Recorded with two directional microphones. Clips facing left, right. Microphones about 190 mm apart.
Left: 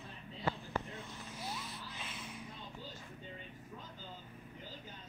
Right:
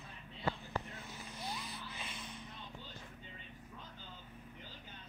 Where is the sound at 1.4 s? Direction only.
5° left (ahead or behind).